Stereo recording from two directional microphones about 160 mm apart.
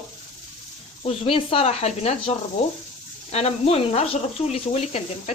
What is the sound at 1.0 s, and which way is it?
Speech, 35° left (ahead or behind).